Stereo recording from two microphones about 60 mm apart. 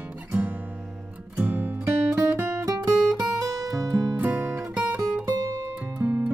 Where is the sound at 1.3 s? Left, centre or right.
Right.